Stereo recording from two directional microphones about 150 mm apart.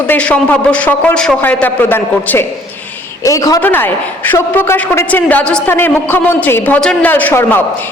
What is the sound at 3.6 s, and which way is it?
A man's voice, 15° left (ahead or behind).